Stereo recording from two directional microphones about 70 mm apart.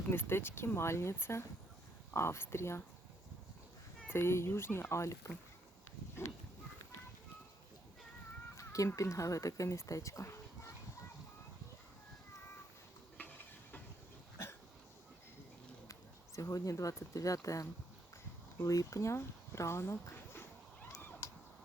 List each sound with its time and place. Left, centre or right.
0.1 s speech: left
4.1 s speech: left
8.5 s a sound: left
9.0 s speech: left
15.9 s speech: left
21.2 s crow: left